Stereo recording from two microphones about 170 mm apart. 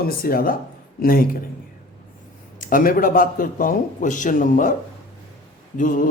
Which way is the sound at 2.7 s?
55° left (ahead or behind).